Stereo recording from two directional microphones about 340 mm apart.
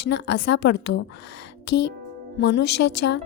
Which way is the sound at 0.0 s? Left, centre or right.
Left.